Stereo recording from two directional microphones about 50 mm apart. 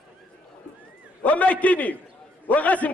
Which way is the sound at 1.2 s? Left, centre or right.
Left.